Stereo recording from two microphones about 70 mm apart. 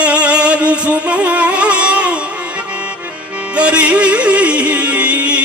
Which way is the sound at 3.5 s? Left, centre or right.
Centre.